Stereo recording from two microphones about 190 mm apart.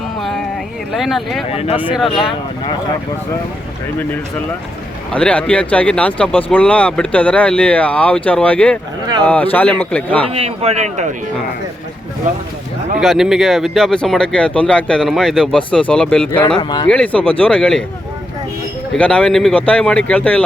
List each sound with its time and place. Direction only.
0.9 s speech: centre (ahead or behind)
1.5 s speech: 30° left (ahead or behind)
1.7 s speech: 5° right (ahead or behind)
5.1 s speech: 5° left (ahead or behind)
10.2 s speech: 30° right (ahead or behind)
13.0 s speech: centre (ahead or behind)
16.6 s speech: 20° left (ahead or behind)
16.9 s speech: 5° left (ahead or behind)
18.9 s speech: 5° left (ahead or behind)